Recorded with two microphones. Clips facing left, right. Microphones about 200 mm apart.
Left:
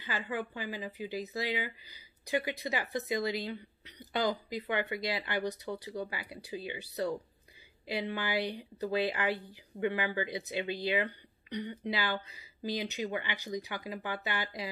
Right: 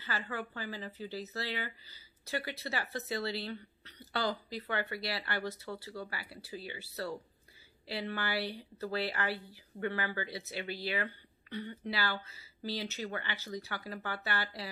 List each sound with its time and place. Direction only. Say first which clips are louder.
0.0 s speech: left 3 dB; 15° left (ahead or behind)